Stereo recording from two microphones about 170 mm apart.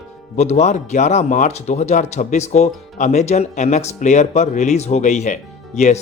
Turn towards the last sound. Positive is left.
turn(degrees=45)  # may be behind; listen again after turning